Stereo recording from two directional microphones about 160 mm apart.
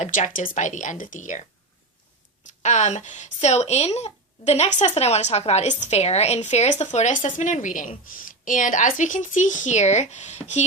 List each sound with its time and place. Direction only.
0.0 s speech: 50° left (ahead or behind)
2.5 s speech: 50° left (ahead or behind)